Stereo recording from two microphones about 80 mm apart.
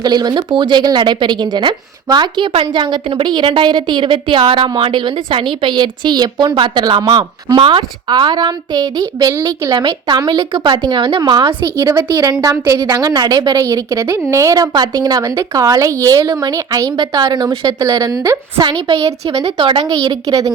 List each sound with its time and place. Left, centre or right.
0.0 s speech: right
11.8 s a woman's voice: right
13.7 s a woman's voice: right
17.0 s a woman's voice: right
18.6 s a woman's voice: right
19.0 s a woman's voice: right
19.5 s a woman's voice: right
19.8 s a woman's voice: right